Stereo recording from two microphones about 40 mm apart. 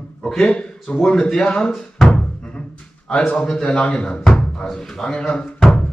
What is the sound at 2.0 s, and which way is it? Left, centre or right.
Music, left.